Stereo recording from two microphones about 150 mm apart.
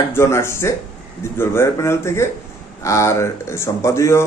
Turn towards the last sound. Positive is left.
turn(degrees=20)  # may be behind; listen again after turning